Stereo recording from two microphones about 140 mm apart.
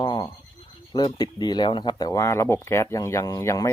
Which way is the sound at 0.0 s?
30° left (ahead or behind).